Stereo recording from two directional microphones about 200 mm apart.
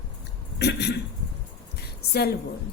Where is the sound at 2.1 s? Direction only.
50° left (ahead or behind).